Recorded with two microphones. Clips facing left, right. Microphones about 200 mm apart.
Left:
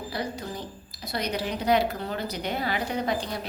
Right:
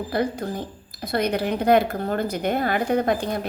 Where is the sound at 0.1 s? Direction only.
55° right (ahead or behind).